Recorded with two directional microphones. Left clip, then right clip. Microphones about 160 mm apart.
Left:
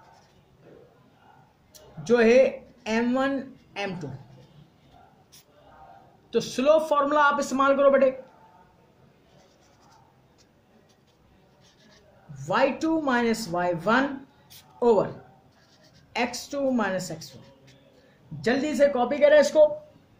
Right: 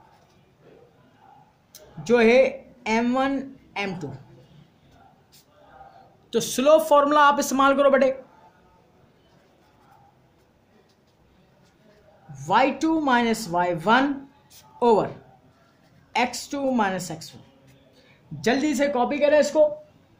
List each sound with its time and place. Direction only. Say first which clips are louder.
2.0 s speech: right 1 dB; 30° right (ahead or behind)
6.3 s a man's voice: right 3 dB; 55° right (ahead or behind)
12.4 s speech: right 3 dB; 35° right (ahead or behind)
16.1 s speech: right 4 dB; 35° right (ahead or behind)
18.4 s speech: even; 45° right (ahead or behind)
18.9 s speech: even; 25° right (ahead or behind)